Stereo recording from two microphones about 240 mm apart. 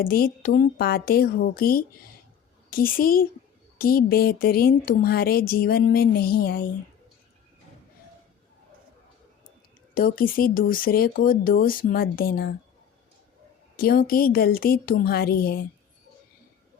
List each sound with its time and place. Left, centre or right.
0.0 s a woman's voice: left
9.9 s speech: left
13.7 s speech: left